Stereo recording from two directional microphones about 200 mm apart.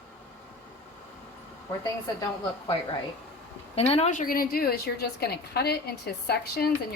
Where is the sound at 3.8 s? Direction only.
30° left (ahead or behind).